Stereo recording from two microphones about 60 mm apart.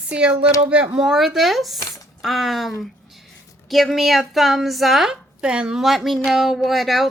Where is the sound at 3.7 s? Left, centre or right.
Centre.